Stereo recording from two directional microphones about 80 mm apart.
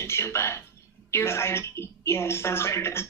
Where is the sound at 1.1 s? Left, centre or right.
Left.